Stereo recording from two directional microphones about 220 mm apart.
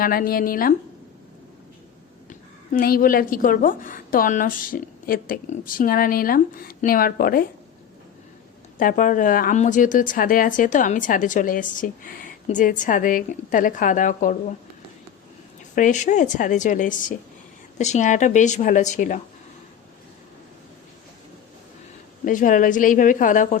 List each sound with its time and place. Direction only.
0.0 s a woman's voice: 40° left (ahead or behind)
2.7 s a woman's voice: 40° left (ahead or behind)
8.8 s a woman's voice: 40° left (ahead or behind)
15.7 s a woman's voice: 35° left (ahead or behind)
22.2 s a woman's voice: 35° left (ahead or behind)